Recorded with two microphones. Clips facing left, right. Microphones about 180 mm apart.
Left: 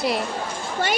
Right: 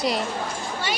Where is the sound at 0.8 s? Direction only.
50° left (ahead or behind).